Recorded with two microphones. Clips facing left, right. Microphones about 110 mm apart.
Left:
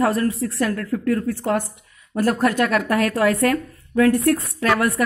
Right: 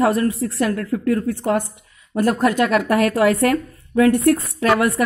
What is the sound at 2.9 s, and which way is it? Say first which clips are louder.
Speech: right 3 dB; 20° right (ahead or behind).